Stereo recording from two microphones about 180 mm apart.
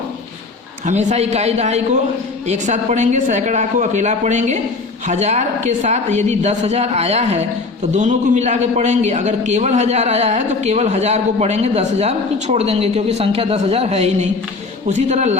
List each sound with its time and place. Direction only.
0.9 s a man's voice: 40° right (ahead or behind)